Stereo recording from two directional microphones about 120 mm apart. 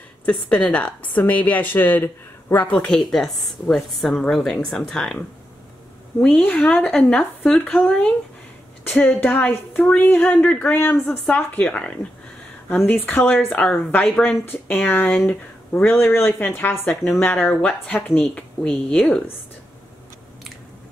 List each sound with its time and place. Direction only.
0.2 s a woman's voice: 10° left (ahead or behind)
2.7 s a woman's voice: 5° left (ahead or behind)
6.2 s a woman's voice: 10° left (ahead or behind)
16.9 s a woman's voice: 5° left (ahead or behind)
17.2 s a woman's voice: 15° left (ahead or behind)